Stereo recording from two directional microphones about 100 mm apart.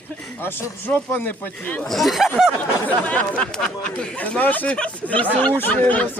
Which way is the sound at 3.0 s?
15° left (ahead or behind).